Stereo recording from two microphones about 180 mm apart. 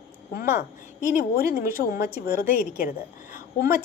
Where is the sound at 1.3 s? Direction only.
55° left (ahead or behind).